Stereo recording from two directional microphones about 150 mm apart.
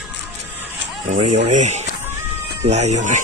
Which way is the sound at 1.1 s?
55° right (ahead or behind).